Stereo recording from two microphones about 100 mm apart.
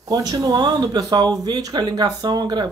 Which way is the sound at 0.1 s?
40° right (ahead or behind).